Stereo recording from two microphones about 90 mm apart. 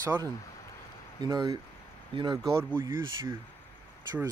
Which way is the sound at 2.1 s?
75° right (ahead or behind).